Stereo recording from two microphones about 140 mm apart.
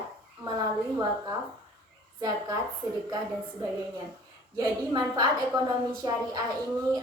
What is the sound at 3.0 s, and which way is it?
A woman's voice, 30° right (ahead or behind).